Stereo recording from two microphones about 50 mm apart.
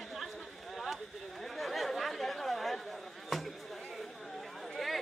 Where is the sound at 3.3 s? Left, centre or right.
Centre.